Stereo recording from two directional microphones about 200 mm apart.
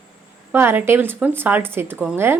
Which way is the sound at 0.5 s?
10° right (ahead or behind).